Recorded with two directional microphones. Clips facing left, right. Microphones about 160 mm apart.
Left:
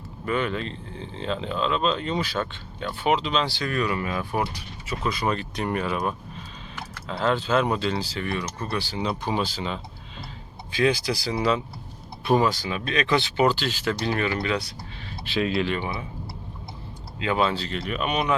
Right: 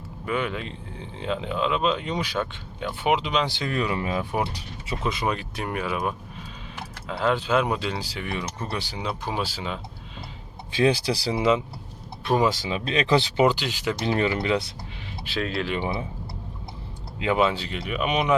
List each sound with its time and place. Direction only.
0.3 s speech: 10° right (ahead or behind)
9.0 s speech: 5° right (ahead or behind)
10.7 s speech: 25° right (ahead or behind)
15.4 s speech: 10° left (ahead or behind)
15.8 s speech: 30° right (ahead or behind)
17.2 s speech: 15° right (ahead or behind)